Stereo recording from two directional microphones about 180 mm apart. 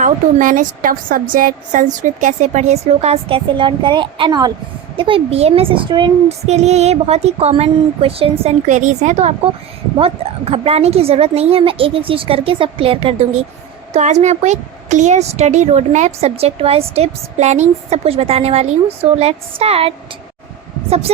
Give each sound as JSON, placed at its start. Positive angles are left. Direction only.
{"t": 0.0, "sound": "a woman's voice", "side_deg": -45}
{"t": 10.5, "sound": "a woman's voice", "side_deg": -30}